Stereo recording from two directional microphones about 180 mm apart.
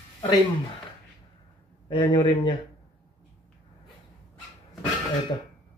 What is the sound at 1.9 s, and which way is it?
Speech, 25° left (ahead or behind).